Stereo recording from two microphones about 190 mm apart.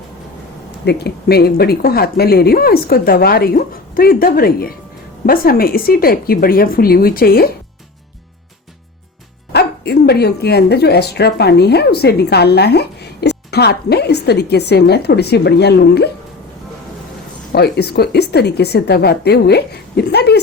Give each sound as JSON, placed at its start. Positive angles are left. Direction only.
{"t": 0.9, "sound": "speech", "side_deg": 60}
{"t": 9.5, "sound": "speech", "side_deg": 60}
{"t": 17.5, "sound": "speech", "side_deg": 55}